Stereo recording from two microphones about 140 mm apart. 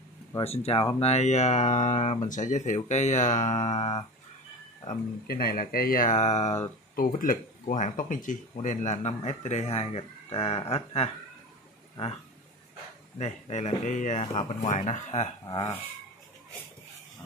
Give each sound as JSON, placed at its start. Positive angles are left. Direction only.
{"t": 0.4, "sound": "speech", "side_deg": 45}
{"t": 4.8, "sound": "speech", "side_deg": 90}
{"t": 7.2, "sound": "speech", "side_deg": 80}
{"t": 13.2, "sound": "speech", "side_deg": 55}
{"t": 14.2, "sound": "speech", "side_deg": 40}
{"t": 14.7, "sound": "speech", "side_deg": 60}